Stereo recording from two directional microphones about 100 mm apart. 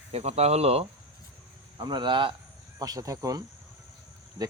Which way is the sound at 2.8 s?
35° right (ahead or behind).